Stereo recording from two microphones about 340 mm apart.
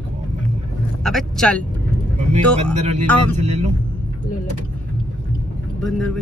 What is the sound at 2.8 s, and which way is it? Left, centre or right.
Speech, centre.